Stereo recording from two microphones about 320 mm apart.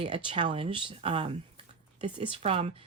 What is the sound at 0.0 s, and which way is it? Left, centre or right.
A woman's voice, centre.